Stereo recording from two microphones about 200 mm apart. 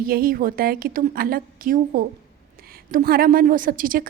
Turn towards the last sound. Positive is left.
turn(degrees=-45)  # may be behind; listen again after turning